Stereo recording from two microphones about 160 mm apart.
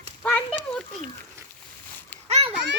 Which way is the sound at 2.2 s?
40° right (ahead or behind).